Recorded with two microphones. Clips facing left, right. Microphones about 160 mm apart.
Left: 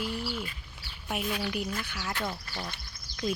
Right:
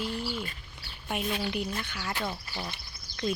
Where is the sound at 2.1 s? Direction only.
5° right (ahead or behind).